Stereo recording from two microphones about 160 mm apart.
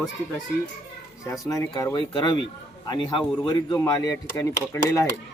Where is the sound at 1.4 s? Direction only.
20° left (ahead or behind).